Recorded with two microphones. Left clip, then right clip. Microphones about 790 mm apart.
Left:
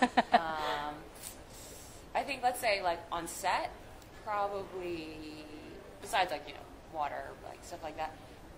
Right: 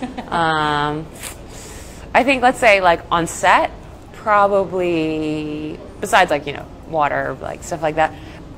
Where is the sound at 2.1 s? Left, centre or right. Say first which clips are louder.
Right 19 dB; right.